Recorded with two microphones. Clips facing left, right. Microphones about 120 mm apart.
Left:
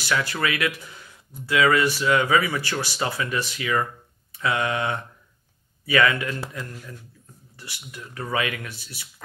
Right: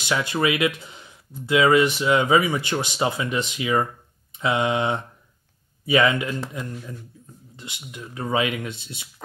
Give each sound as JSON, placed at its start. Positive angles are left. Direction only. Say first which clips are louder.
{"t": 0.0, "sound": "speech", "louder": "right 2 dB", "side_deg": -20}